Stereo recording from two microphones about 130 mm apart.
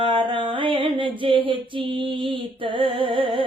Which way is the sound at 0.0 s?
40° right (ahead or behind).